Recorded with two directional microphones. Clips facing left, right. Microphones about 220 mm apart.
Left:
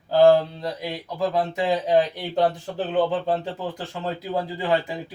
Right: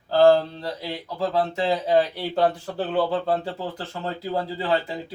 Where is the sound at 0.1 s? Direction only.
15° left (ahead or behind).